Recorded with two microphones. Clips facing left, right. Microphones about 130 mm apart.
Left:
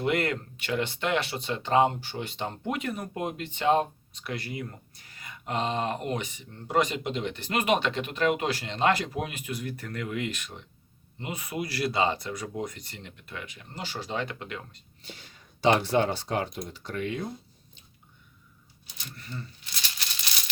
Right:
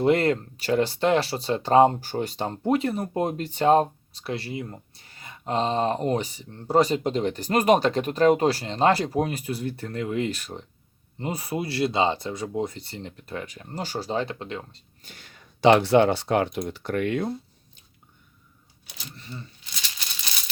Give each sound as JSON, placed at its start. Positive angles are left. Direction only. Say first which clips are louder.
{"t": 0.0, "sound": "speech", "louder": "right 7 dB", "side_deg": -30}
{"t": 15.0, "sound": "speech", "louder": "left 4 dB", "side_deg": -45}
{"t": 15.6, "sound": "speech", "louder": "right 6 dB", "side_deg": -80}
{"t": 19.1, "sound": "speech", "louder": "even", "side_deg": -25}